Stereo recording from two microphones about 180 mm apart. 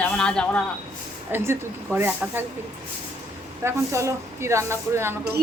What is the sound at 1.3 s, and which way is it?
Speech, 10° right (ahead or behind).